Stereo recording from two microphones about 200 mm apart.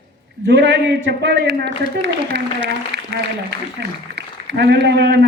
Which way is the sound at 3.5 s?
55° right (ahead or behind).